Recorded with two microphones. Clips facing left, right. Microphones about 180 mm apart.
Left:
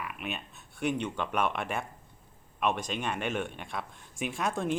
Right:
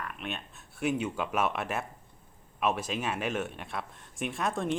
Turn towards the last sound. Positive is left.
turn(degrees=0)  # may be behind; listen again after turning